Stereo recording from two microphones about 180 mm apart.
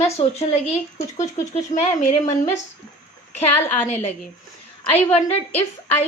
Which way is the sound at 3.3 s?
35° left (ahead or behind).